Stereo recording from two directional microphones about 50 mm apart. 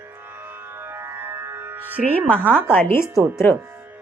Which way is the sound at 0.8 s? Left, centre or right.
Right.